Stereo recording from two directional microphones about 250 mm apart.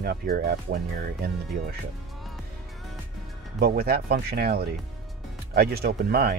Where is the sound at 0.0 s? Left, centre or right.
Right.